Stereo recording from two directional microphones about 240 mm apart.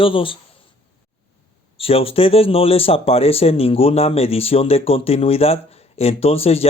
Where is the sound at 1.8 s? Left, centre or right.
Left.